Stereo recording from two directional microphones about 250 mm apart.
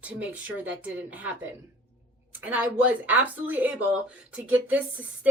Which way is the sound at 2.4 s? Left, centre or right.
Centre.